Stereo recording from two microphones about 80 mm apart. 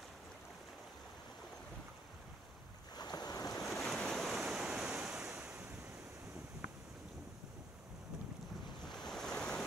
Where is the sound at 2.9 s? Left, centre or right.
Left.